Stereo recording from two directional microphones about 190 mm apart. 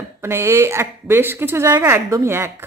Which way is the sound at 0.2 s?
15° right (ahead or behind).